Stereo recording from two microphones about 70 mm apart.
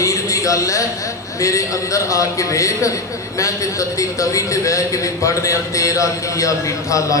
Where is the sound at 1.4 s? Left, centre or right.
Left.